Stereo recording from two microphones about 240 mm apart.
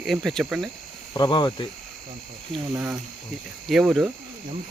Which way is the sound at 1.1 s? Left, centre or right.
Centre.